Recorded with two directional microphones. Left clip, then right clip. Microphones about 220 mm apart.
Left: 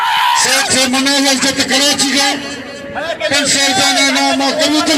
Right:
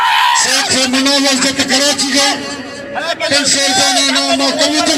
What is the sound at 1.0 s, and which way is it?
Speech, 40° right (ahead or behind).